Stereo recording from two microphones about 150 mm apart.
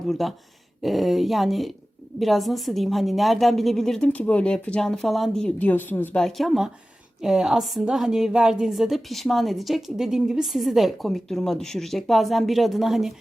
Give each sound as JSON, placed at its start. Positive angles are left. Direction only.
{"t": 0.1, "sound": "a woman's voice", "side_deg": 0}
{"t": 6.2, "sound": "a woman's voice", "side_deg": 0}